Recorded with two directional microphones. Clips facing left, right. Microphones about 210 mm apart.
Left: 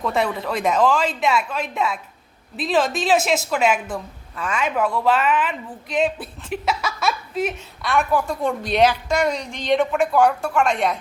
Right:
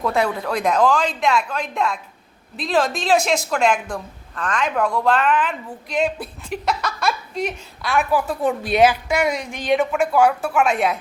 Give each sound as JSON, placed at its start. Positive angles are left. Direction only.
{"t": 0.0, "sound": "a woman's voice", "side_deg": 0}